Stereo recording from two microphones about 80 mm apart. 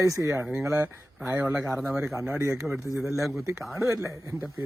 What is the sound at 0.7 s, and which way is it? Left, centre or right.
Speech, right.